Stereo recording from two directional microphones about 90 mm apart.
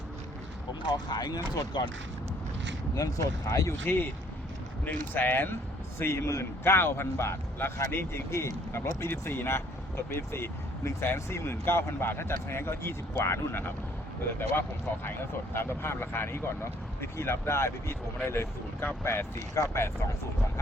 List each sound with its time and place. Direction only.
0.8 s speech: 55° left (ahead or behind)
2.9 s speech: 35° left (ahead or behind)
3.8 s speech: 25° left (ahead or behind)
15.0 s speech: 25° left (ahead or behind)